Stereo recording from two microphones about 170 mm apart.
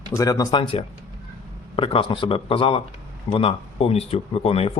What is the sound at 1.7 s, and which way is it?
Speech, 30° left (ahead or behind).